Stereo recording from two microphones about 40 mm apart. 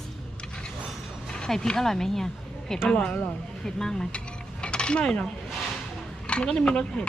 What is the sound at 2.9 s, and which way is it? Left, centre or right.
Speech, left.